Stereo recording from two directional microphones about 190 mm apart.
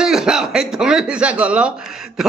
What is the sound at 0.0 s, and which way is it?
Speech, 5° right (ahead or behind).